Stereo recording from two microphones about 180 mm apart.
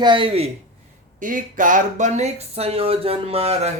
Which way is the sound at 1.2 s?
45° right (ahead or behind).